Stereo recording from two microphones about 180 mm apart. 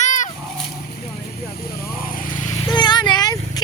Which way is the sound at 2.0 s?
50° left (ahead or behind).